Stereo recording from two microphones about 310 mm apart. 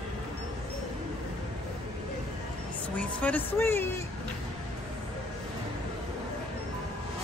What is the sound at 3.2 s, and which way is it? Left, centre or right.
Speech, centre.